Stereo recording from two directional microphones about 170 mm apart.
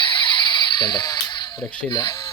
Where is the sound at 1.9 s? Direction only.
25° left (ahead or behind).